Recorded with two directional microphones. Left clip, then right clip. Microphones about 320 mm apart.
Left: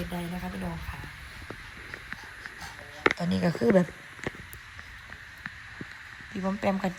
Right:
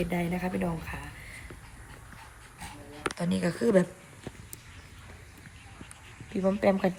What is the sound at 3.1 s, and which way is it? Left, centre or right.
Speech, centre.